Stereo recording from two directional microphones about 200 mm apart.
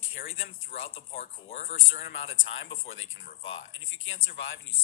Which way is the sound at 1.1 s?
30° left (ahead or behind).